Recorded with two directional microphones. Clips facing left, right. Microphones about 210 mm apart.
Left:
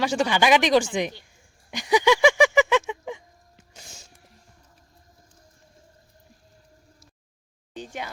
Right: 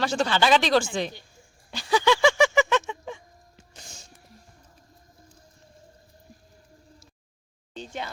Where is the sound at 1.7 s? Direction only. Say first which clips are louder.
Left 2 dB; 15° left (ahead or behind).